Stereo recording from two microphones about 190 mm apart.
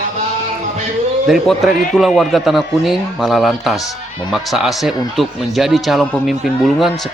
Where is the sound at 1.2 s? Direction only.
Centre (ahead or behind).